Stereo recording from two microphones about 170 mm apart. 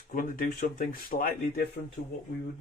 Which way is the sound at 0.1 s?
55° left (ahead or behind).